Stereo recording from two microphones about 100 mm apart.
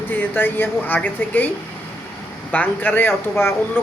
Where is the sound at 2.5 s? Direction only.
15° left (ahead or behind).